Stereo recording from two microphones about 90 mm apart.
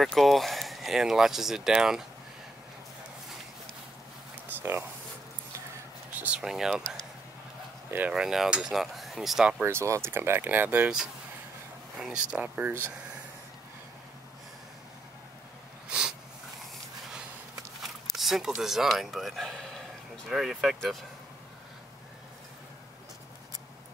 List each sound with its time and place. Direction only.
0.0 s speech: centre (ahead or behind)
4.6 s speech: 20° right (ahead or behind)
6.4 s speech: 5° right (ahead or behind)
8.1 s speech: 5° right (ahead or behind)
9.7 s speech: 30° right (ahead or behind); by 12.4 s 10° right (ahead or behind)
12.4 s speech: 20° right (ahead or behind)
15.9 s a sound: 10° right (ahead or behind)
18.1 s speech: 5° right (ahead or behind)